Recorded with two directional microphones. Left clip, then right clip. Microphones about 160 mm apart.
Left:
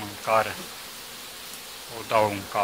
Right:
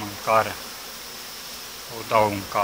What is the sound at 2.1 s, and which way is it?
Speech, 30° left (ahead or behind).